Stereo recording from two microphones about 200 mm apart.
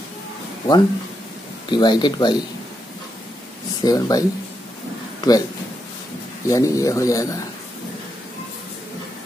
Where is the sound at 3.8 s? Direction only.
20° left (ahead or behind).